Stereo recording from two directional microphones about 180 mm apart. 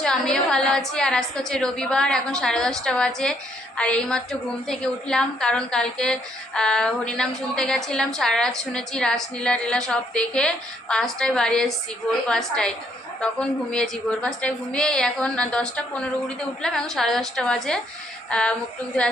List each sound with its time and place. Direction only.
0.0 s a woman's voice: 5° left (ahead or behind)